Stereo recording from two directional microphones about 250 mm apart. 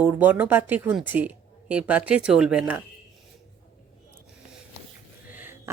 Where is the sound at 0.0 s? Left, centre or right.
Centre.